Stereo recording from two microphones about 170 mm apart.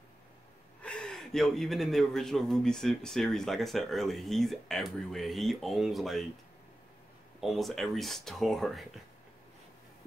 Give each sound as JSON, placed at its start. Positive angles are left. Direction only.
{"t": 0.8, "sound": "a man's voice", "side_deg": 5}
{"t": 7.3, "sound": "a man's voice", "side_deg": 0}